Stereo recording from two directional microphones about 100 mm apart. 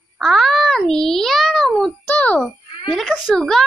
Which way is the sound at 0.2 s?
Centre (ahead or behind).